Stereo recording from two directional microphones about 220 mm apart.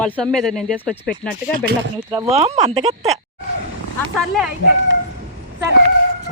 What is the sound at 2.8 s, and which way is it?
Speech, 30° right (ahead or behind).